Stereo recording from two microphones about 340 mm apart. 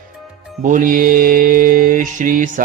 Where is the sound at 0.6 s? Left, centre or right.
Right.